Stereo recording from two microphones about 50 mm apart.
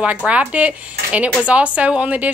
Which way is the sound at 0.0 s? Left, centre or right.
Right.